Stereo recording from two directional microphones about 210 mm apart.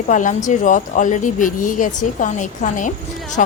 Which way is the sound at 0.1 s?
35° left (ahead or behind).